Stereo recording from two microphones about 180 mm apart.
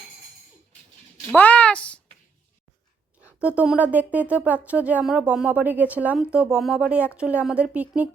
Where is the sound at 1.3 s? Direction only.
10° left (ahead or behind).